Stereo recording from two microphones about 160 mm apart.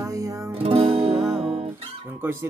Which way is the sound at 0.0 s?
20° right (ahead or behind).